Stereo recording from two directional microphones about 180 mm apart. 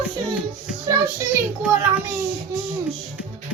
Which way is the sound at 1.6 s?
10° right (ahead or behind).